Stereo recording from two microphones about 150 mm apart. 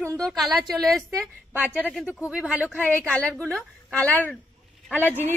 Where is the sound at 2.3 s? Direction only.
10° right (ahead or behind).